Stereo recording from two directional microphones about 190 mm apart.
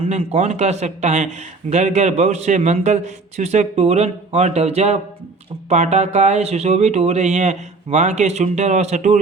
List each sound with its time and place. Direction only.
0.0 s speech: 35° right (ahead or behind)